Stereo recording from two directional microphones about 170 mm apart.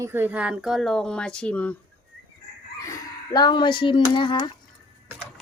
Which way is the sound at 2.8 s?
20° left (ahead or behind).